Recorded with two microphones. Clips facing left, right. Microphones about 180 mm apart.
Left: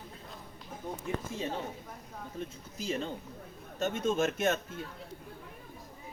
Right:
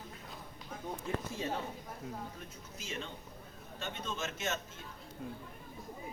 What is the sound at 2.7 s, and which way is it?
A woman's voice, 35° left (ahead or behind).